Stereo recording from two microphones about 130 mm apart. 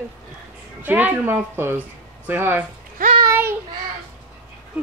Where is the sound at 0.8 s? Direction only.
15° right (ahead or behind).